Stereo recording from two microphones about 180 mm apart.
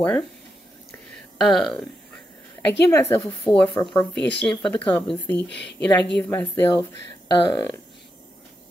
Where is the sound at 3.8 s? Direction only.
20° left (ahead or behind).